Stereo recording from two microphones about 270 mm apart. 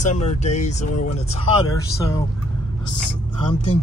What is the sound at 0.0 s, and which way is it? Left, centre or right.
Speech, left.